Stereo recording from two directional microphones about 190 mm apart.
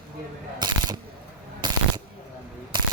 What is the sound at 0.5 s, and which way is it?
Camera, 20° right (ahead or behind).